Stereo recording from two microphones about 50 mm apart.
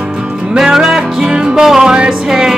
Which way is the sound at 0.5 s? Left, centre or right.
Centre.